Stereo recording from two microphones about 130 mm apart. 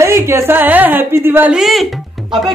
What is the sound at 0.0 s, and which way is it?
Speech, 20° right (ahead or behind).